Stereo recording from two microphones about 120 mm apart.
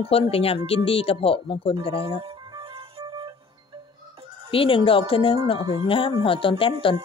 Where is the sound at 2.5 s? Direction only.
50° right (ahead or behind).